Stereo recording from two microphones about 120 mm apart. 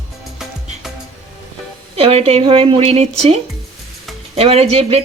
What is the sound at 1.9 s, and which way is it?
Speech, 55° right (ahead or behind).